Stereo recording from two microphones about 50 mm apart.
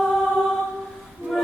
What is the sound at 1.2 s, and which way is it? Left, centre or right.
Music, right.